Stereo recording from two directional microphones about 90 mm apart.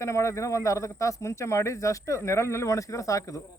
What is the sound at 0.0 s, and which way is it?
A man's voice, 35° left (ahead or behind).